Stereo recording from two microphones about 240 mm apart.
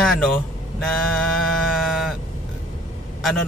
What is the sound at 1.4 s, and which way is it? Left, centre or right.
Music, centre.